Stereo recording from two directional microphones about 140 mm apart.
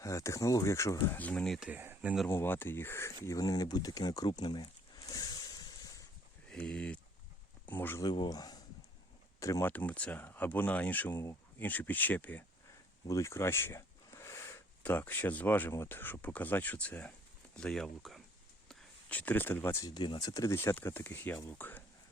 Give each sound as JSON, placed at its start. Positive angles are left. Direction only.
{"t": 0.0, "sound": "speech", "side_deg": 20}
{"t": 1.1, "sound": "speech", "side_deg": 10}
{"t": 1.5, "sound": "speech", "side_deg": -5}
{"t": 2.2, "sound": "speech", "side_deg": 15}
{"t": 3.2, "sound": "a sound", "side_deg": 25}
{"t": 6.5, "sound": "speech", "side_deg": 5}
{"t": 8.0, "sound": "speech", "side_deg": 30}
{"t": 13.1, "sound": "a sound", "side_deg": 20}
{"t": 14.8, "sound": "speech", "side_deg": 10}
{"t": 18.7, "sound": "a sound", "side_deg": 5}
{"t": 19.8, "sound": "speech", "side_deg": 30}